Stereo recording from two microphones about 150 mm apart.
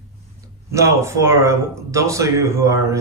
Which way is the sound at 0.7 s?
20° right (ahead or behind).